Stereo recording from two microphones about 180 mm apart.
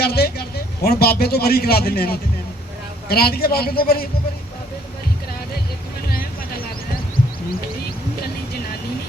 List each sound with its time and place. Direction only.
0.0 s a man's voice: 60° left (ahead or behind)